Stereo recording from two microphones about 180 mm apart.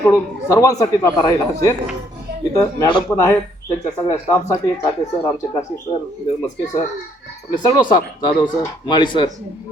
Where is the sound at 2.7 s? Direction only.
20° left (ahead or behind).